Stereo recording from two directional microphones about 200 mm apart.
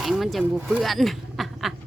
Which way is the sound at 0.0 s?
Centre (ahead or behind).